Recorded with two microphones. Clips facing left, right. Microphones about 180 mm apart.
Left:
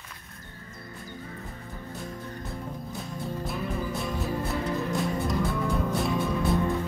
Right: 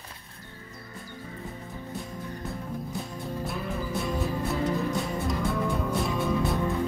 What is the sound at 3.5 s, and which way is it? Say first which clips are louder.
Music: left 1 dB; centre (ahead or behind).